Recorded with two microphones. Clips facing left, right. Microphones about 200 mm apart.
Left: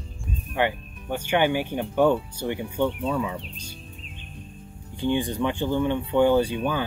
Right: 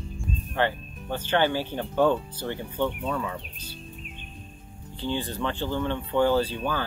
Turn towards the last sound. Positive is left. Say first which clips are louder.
# left 3 dB
turn(degrees=15)  # may be behind; listen again after turning